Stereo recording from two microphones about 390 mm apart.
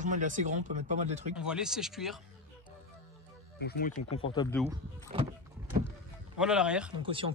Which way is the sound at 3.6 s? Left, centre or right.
Left.